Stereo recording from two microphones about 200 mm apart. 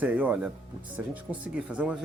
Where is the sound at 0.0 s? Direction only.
5° right (ahead or behind).